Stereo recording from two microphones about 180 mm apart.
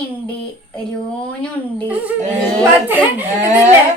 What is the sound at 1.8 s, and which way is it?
Speech, 10° right (ahead or behind).